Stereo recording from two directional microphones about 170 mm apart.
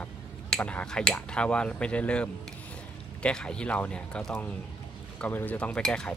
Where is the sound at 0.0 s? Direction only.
5° left (ahead or behind).